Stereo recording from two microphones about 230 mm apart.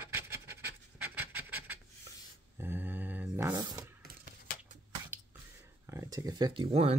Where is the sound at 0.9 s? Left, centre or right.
Centre.